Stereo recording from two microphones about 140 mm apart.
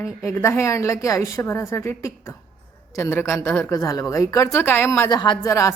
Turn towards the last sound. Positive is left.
turn(degrees=20)  # may be behind; listen again after turning